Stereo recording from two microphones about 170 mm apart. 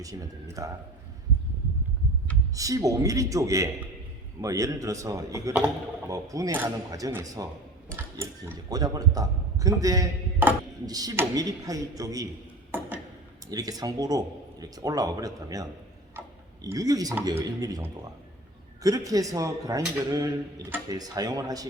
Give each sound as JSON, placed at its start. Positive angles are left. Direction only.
{"t": 0.0, "sound": "a man's voice", "side_deg": -20}
{"t": 2.6, "sound": "a man's voice", "side_deg": -20}
{"t": 13.5, "sound": "a man's voice", "side_deg": -20}